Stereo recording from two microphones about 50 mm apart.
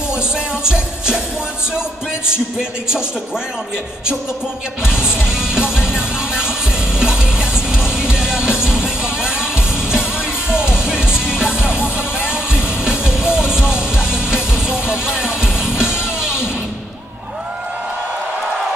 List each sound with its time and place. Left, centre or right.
0.7 s music: centre
4.8 s music: centre
12.8 s music: centre